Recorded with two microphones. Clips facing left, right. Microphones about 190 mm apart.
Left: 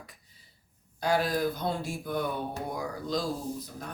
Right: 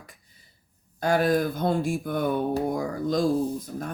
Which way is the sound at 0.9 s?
50° right (ahead or behind).